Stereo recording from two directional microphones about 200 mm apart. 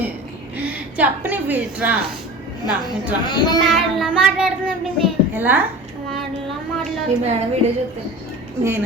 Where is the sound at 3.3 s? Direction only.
20° left (ahead or behind).